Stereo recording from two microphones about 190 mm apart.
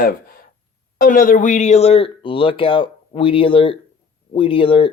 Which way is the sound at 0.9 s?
45° left (ahead or behind).